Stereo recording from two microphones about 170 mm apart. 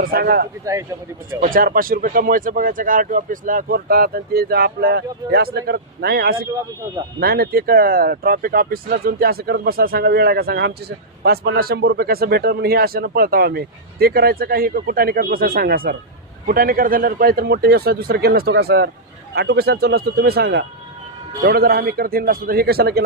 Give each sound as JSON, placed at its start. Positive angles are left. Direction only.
{"t": 0.0, "sound": "speech", "side_deg": -60}
{"t": 0.6, "sound": "speech", "side_deg": -20}
{"t": 1.4, "sound": "speech", "side_deg": -55}